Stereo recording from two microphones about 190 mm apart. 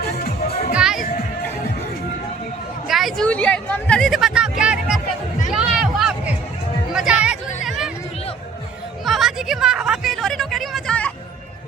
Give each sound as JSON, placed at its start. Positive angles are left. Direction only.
{"t": 0.0, "sound": "music", "side_deg": 55}
{"t": 0.8, "sound": "music", "side_deg": -5}
{"t": 2.8, "sound": "a sound", "side_deg": 0}
{"t": 5.5, "sound": "music", "side_deg": -5}
{"t": 6.9, "sound": "hubbub", "side_deg": -5}
{"t": 9.0, "sound": "a sound", "side_deg": 0}